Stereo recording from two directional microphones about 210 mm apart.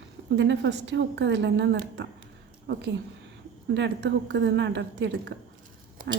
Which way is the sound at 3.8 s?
55° right (ahead or behind).